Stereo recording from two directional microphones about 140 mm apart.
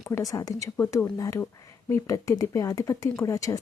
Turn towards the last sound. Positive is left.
turn(degrees=25)  # may be behind; listen again after turning